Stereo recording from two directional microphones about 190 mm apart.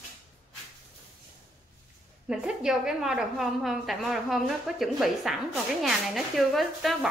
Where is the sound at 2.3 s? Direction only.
5° right (ahead or behind).